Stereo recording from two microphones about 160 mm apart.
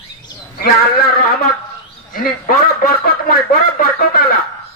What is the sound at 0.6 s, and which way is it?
A man's voice, 70° left (ahead or behind).